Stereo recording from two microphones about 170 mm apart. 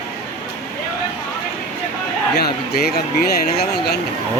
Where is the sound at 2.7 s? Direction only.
65° left (ahead or behind).